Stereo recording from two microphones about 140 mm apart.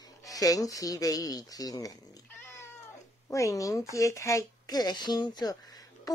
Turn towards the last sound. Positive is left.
turn(degrees=25)  # may be behind; listen again after turning